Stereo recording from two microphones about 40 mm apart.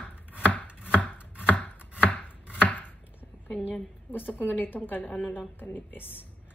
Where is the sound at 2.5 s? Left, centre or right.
Left.